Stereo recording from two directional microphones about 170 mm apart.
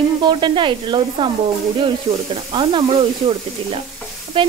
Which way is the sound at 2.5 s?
30° right (ahead or behind).